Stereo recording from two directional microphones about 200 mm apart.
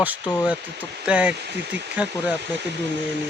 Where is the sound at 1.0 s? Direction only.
5° right (ahead or behind).